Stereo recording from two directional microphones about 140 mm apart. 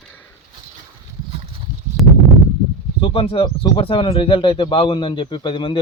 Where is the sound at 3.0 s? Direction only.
40° left (ahead or behind).